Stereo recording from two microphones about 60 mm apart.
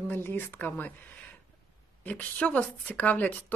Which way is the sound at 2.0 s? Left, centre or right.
Left.